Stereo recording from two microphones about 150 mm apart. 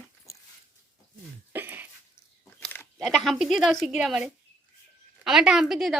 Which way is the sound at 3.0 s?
Centre (ahead or behind).